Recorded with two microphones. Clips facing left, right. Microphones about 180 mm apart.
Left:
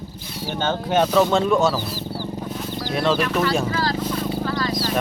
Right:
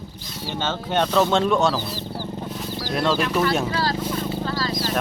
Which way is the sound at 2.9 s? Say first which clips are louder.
Left 1 dB; centre (ahead or behind).